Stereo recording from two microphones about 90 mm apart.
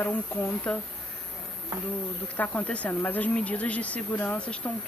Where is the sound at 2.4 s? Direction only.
15° left (ahead or behind).